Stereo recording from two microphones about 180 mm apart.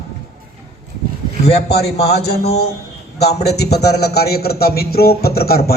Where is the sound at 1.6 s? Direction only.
65° left (ahead or behind).